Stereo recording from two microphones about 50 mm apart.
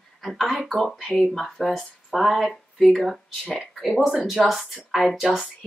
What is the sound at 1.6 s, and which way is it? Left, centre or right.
A woman's voice, centre.